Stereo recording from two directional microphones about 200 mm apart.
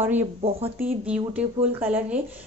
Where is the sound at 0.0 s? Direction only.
10° right (ahead or behind).